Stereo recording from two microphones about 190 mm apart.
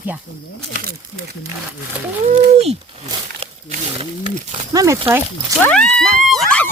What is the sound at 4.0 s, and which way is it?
Wild animals, 35° right (ahead or behind).